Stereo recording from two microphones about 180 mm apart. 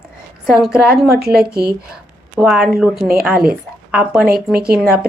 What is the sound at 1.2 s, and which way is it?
Speech, 60° right (ahead or behind).